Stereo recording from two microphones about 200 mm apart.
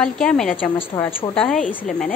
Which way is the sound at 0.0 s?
5° left (ahead or behind).